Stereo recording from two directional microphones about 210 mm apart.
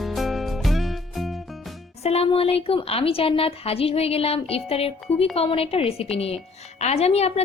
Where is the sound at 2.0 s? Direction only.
30° left (ahead or behind).